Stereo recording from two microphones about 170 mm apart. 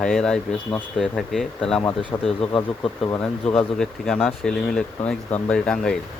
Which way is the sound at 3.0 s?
20° left (ahead or behind).